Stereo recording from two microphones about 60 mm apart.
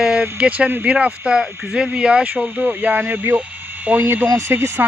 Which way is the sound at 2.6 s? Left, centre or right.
Right.